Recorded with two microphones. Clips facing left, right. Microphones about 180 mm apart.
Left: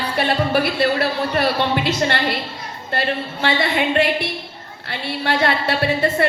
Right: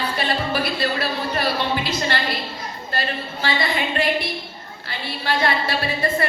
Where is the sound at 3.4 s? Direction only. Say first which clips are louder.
Left 4 dB; 65° left (ahead or behind).